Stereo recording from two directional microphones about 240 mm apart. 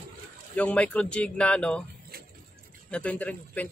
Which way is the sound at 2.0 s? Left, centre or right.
Right.